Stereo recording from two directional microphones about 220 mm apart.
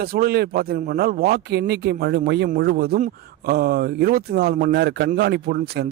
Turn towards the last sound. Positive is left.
turn(degrees=-45)  # may be behind; listen again after turning